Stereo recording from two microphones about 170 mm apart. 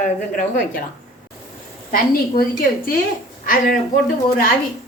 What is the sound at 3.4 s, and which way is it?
Speech, 60° left (ahead or behind).